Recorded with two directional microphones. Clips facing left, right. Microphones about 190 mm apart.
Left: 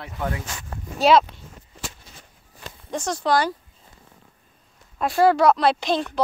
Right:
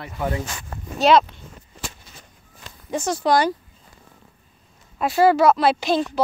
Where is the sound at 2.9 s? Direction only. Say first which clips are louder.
Right 2 dB; 5° right (ahead or behind).